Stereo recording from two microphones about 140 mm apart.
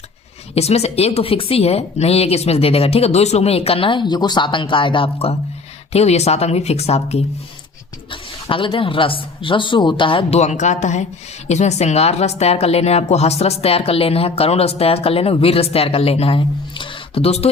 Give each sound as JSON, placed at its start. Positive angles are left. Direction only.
{"t": 0.5, "sound": "speech", "side_deg": 50}
{"t": 8.1, "sound": "speech", "side_deg": 40}